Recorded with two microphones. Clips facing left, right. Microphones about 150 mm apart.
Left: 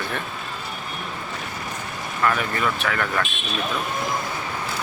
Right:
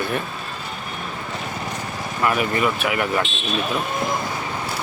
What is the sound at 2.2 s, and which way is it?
Speech, 15° right (ahead or behind).